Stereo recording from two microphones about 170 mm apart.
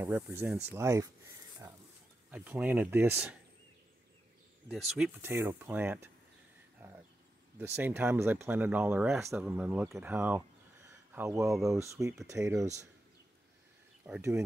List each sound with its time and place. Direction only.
0.0 s speech: 15° right (ahead or behind)
2.3 s speech: 10° right (ahead or behind)
4.6 s speech: 5° right (ahead or behind)
7.5 s speech: 10° right (ahead or behind)
14.0 s speech: 10° right (ahead or behind)